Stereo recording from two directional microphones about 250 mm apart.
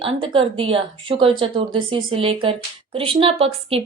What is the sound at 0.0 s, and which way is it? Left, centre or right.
Speech, right.